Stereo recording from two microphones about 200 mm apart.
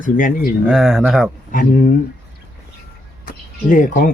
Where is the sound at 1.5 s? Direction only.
40° left (ahead or behind).